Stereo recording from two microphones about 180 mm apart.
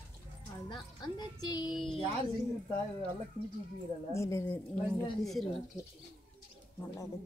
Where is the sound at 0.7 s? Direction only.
25° left (ahead or behind).